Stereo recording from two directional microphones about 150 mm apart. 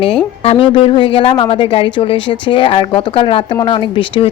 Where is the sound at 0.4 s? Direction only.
35° left (ahead or behind).